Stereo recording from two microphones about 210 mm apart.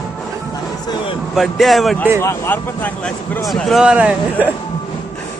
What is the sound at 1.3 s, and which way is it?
Speech, centre (ahead or behind).